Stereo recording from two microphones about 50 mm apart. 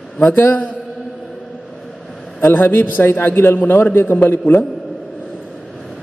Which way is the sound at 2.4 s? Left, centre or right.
Left.